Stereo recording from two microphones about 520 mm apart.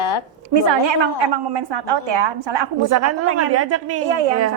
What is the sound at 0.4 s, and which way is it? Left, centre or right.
A woman's voice, right.